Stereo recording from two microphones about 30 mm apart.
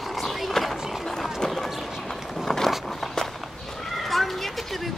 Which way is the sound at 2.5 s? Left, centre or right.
Centre.